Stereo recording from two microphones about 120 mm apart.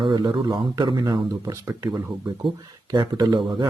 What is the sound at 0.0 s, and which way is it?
Speech, 40° right (ahead or behind).